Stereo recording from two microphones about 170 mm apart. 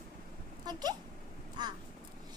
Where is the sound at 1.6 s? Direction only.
25° right (ahead or behind).